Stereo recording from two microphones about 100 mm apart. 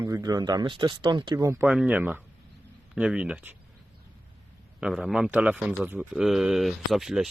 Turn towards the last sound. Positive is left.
turn(degrees=-5)  # may be behind; listen again after turning